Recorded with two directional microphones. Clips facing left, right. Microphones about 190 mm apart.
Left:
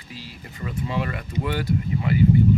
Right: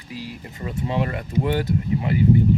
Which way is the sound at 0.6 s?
25° right (ahead or behind).